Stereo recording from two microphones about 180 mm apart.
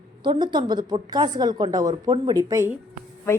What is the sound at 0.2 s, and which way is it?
A woman's voice, 25° right (ahead or behind).